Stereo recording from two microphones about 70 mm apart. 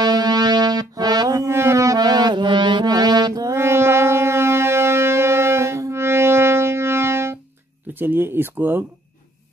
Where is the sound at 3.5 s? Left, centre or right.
Right.